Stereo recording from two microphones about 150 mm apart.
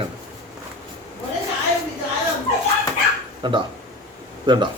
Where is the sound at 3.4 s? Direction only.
30° right (ahead or behind).